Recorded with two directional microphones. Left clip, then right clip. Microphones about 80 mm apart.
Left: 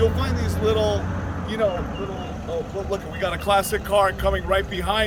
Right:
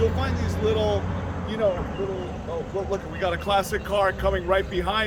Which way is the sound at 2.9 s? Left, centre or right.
Centre.